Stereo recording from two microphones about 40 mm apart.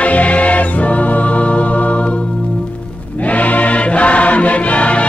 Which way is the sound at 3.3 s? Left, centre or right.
Left.